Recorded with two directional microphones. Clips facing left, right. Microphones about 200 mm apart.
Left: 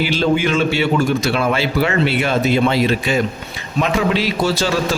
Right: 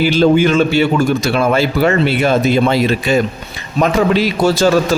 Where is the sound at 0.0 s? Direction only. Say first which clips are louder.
Right 6 dB; 40° right (ahead or behind).